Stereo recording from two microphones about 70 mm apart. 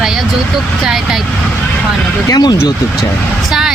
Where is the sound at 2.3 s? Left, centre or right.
Left.